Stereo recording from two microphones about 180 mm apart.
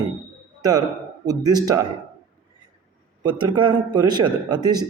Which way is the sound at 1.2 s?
20° right (ahead or behind).